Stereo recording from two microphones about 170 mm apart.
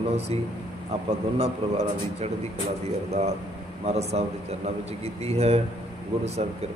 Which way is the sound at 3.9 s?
40° right (ahead or behind).